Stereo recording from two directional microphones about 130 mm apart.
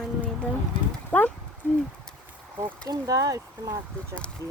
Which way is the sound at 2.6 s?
30° right (ahead or behind).